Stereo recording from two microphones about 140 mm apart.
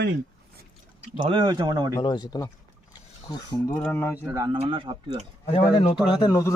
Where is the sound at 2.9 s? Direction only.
30° left (ahead or behind).